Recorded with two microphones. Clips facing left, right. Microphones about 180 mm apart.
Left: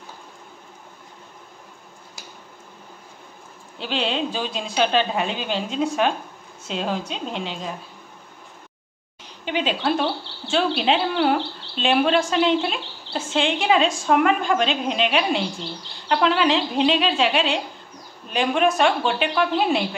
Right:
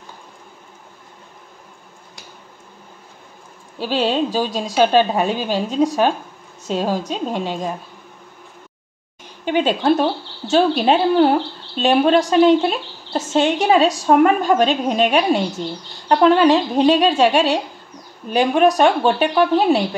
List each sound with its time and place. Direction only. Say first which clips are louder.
3.8 s a woman's voice: right 6 dB; 40° right (ahead or behind)
9.2 s a woman's voice: right 7 dB; 50° right (ahead or behind)